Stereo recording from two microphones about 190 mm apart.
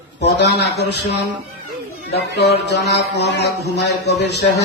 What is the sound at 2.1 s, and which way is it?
Speech, 60° left (ahead or behind).